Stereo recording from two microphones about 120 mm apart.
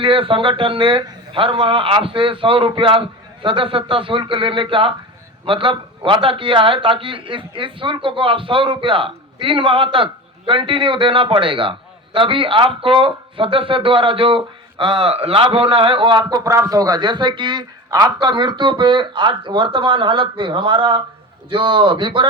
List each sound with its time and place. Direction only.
0.0 s a man's voice: 45° right (ahead or behind)
16.4 s a man's voice: 30° right (ahead or behind)